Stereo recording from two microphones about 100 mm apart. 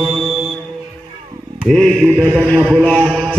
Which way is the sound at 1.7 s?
5° left (ahead or behind).